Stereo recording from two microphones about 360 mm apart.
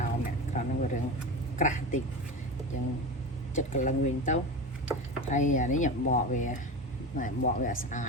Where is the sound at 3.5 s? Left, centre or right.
Left.